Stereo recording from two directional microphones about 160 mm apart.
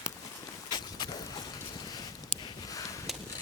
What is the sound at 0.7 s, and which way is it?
Boat, 25° left (ahead or behind).